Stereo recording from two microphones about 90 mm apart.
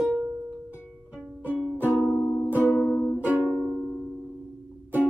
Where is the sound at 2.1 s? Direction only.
15° left (ahead or behind).